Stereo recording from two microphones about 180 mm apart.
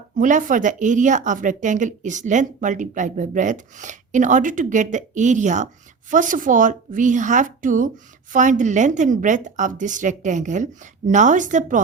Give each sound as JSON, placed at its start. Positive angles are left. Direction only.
{"t": 0.2, "sound": "speech", "side_deg": -45}